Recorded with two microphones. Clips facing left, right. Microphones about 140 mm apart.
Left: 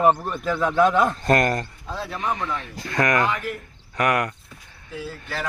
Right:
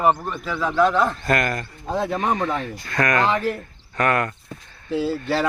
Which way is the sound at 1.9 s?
50° right (ahead or behind).